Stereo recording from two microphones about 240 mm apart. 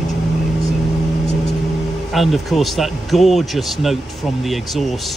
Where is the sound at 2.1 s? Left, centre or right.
Centre.